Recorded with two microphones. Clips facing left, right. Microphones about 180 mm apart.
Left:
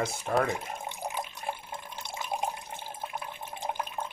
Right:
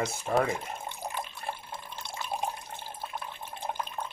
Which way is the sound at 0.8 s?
15° left (ahead or behind).